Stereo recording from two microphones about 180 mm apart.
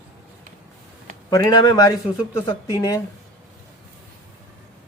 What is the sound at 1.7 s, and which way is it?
Speech, 20° left (ahead or behind).